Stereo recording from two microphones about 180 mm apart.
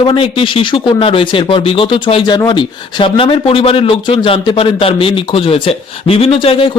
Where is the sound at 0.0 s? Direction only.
30° left (ahead or behind).